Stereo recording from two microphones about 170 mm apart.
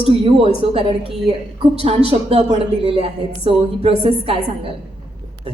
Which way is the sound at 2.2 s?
35° right (ahead or behind).